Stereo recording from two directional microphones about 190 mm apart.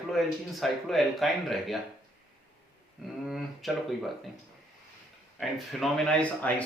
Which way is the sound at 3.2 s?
Centre (ahead or behind).